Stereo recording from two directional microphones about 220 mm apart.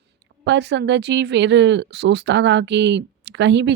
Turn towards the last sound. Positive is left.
turn(degrees=-55)  # may be behind; listen again after turning